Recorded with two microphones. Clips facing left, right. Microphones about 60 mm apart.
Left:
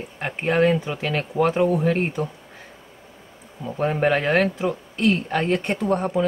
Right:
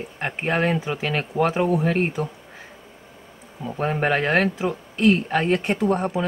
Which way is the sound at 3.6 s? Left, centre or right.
Centre.